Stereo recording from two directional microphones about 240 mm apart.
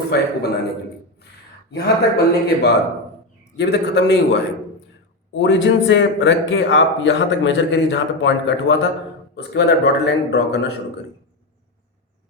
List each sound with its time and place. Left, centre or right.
0.1 s speech: left
1.7 s speech: left